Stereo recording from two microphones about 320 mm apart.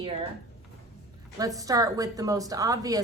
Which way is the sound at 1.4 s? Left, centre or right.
Centre.